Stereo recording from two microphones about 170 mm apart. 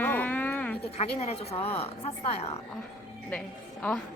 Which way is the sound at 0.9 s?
40° left (ahead or behind).